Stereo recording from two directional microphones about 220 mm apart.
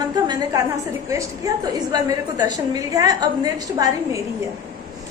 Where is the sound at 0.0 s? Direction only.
20° right (ahead or behind).